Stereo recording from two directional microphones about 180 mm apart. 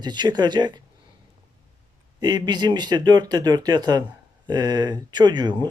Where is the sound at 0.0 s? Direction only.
25° right (ahead or behind).